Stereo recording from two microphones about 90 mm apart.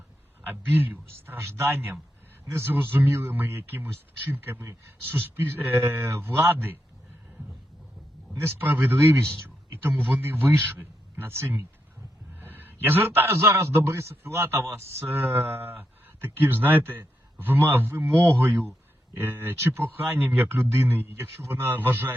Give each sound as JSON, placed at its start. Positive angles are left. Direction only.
{"t": 0.4, "sound": "speech", "side_deg": -20}
{"t": 8.4, "sound": "speech", "side_deg": -25}